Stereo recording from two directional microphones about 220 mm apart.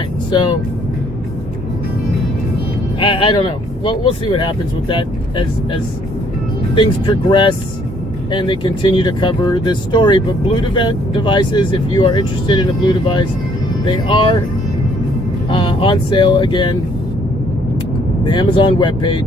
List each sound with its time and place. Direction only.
0.3 s speech: 20° left (ahead or behind)
3.0 s speech: 25° left (ahead or behind)
6.7 s speech: 20° left (ahead or behind)
15.4 s speech: 25° left (ahead or behind)
18.3 s speech: 20° left (ahead or behind)